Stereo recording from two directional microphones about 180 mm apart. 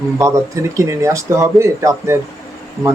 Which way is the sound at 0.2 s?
15° right (ahead or behind).